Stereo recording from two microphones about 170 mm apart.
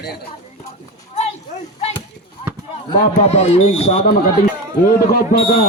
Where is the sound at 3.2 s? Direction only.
40° left (ahead or behind).